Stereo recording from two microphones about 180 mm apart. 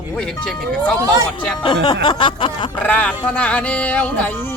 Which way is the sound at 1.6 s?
25° left (ahead or behind).